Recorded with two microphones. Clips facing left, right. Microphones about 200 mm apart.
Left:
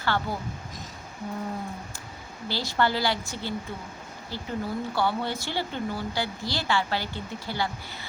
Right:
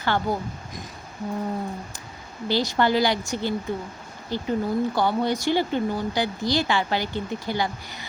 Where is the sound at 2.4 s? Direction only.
15° right (ahead or behind).